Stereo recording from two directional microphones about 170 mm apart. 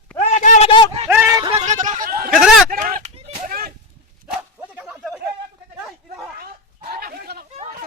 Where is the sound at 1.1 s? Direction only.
15° right (ahead or behind).